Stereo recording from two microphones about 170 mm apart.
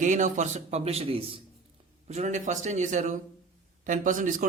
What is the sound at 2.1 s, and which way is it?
A man's voice, 45° right (ahead or behind).